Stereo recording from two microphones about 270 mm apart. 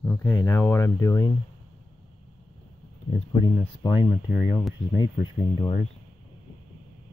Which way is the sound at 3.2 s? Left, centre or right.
Centre.